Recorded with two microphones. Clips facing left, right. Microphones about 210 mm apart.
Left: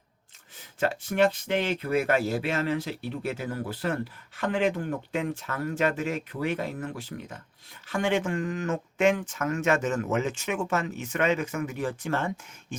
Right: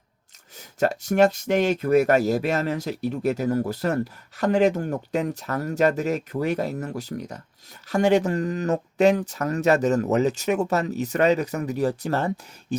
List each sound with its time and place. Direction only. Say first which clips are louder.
0.5 s speech: right 5 dB; 40° right (ahead or behind)